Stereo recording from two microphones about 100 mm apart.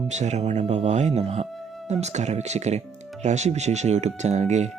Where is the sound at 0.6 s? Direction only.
90° right.